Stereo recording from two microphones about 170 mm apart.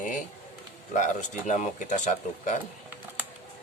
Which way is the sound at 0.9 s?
45° left (ahead or behind).